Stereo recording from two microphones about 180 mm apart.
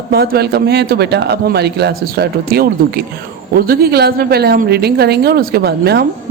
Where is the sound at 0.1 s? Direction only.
60° right (ahead or behind).